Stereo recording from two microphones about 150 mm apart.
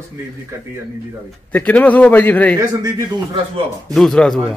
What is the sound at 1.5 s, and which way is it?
A man's voice, 10° left (ahead or behind).